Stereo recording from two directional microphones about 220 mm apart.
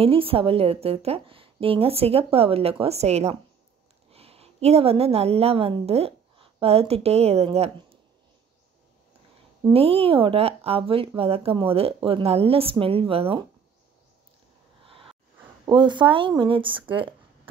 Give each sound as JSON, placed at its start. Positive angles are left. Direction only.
{"t": 0.0, "sound": "a woman's voice", "side_deg": -25}
{"t": 9.7, "sound": "speech", "side_deg": -25}
{"t": 14.9, "sound": "a sound", "side_deg": -25}
{"t": 15.6, "sound": "speech", "side_deg": -20}